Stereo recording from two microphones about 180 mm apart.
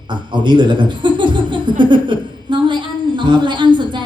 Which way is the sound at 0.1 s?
25° right (ahead or behind).